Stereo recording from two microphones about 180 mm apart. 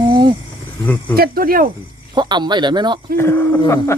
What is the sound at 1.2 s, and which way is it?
Speech, 55° right (ahead or behind).